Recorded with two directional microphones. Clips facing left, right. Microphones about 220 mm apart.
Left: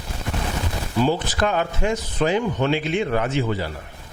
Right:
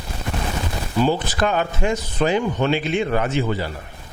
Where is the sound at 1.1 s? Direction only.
10° right (ahead or behind).